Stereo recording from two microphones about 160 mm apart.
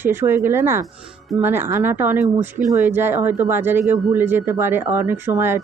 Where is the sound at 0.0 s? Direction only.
15° right (ahead or behind).